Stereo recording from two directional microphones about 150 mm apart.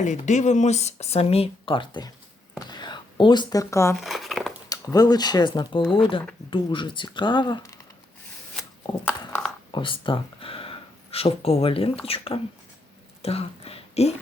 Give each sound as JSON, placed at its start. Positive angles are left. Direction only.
{"t": 0.0, "sound": "speech", "side_deg": 55}
{"t": 2.6, "sound": "a sound", "side_deg": 30}
{"t": 4.0, "sound": "crumpling", "side_deg": 0}
{"t": 4.7, "sound": "speech", "side_deg": 25}
{"t": 8.6, "sound": "a sound", "side_deg": 5}
{"t": 9.7, "sound": "speech", "side_deg": 35}